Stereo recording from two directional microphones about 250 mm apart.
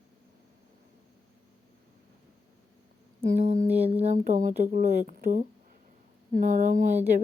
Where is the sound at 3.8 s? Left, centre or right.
Right.